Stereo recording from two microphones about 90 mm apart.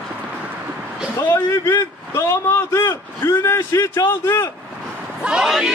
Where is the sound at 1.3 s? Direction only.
35° left (ahead or behind).